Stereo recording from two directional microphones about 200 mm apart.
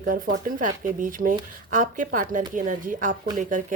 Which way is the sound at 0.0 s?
45° right (ahead or behind).